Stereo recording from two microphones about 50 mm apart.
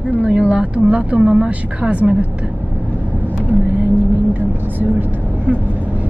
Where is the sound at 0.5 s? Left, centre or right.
Right.